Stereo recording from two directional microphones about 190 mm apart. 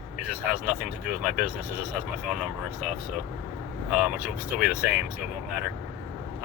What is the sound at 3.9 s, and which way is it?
Speech, 5° right (ahead or behind).